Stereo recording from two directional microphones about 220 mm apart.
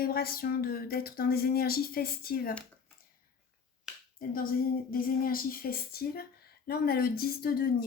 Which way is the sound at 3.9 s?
Centre (ahead or behind).